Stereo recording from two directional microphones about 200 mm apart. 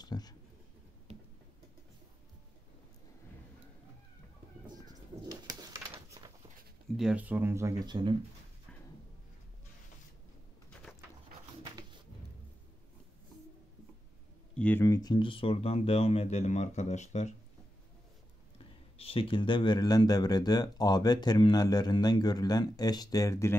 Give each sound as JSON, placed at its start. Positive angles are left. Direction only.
{"t": 0.0, "sound": "a sound", "side_deg": 20}
{"t": 1.1, "sound": "tick-tock", "side_deg": -35}
{"t": 5.3, "sound": "pigeon", "side_deg": -20}
{"t": 7.0, "sound": "speech", "side_deg": -5}
{"t": 10.9, "sound": "pigeon", "side_deg": -5}
{"t": 11.6, "sound": "a sound", "side_deg": -20}
{"t": 14.5, "sound": "speech", "side_deg": 5}
{"t": 18.9, "sound": "speech", "side_deg": 30}